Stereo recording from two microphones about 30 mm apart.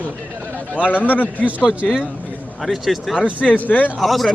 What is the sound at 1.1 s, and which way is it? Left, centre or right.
Speech, left.